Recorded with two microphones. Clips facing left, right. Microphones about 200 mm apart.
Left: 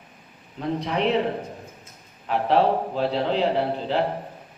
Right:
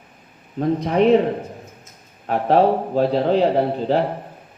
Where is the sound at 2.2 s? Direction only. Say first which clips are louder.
Right 4 dB; 45° right (ahead or behind).